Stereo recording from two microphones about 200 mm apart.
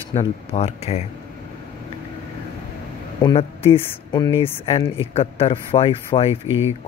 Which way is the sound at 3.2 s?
25° left (ahead or behind).